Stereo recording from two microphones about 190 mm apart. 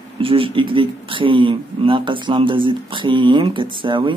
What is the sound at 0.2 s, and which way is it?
Speech, 30° right (ahead or behind).